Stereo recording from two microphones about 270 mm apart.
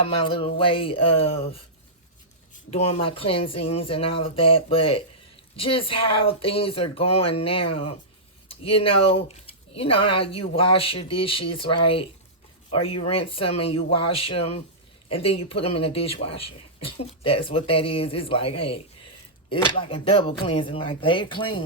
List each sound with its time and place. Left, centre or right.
0.0 s speech: left
2.7 s speech: left
12.8 s speech: left
18.6 s a sound: left
19.5 s speech: centre